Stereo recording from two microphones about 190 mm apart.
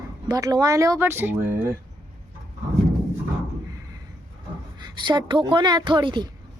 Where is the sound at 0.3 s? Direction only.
20° right (ahead or behind).